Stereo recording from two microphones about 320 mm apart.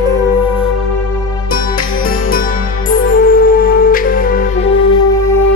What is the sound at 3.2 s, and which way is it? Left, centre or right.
Music, left.